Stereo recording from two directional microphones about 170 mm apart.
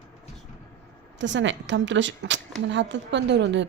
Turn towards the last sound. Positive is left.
turn(degrees=-90)